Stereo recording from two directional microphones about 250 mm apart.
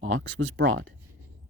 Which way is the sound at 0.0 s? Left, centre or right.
Right.